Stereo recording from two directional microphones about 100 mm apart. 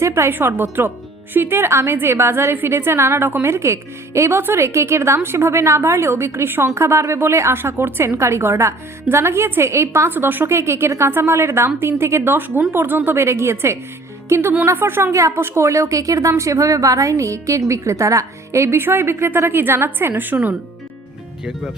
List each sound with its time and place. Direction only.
0.0 s a woman's voice: 25° right (ahead or behind)